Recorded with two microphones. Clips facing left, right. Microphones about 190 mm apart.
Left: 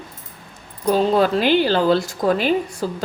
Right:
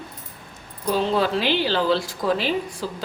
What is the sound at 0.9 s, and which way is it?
A woman's voice, 50° left (ahead or behind).